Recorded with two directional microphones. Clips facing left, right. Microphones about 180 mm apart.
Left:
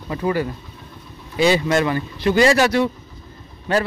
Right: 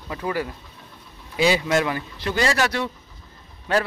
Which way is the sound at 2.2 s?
15° left (ahead or behind).